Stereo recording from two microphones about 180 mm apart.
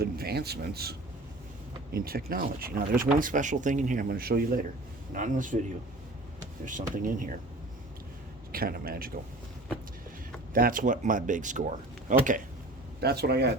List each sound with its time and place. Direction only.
0.0 s speech: 60° right (ahead or behind)
5.1 s speech: 45° right (ahead or behind)
6.7 s speech: 45° right (ahead or behind)
8.5 s speech: 55° right (ahead or behind)
10.5 s speech: 50° right (ahead or behind)
13.0 s speech: 65° right (ahead or behind)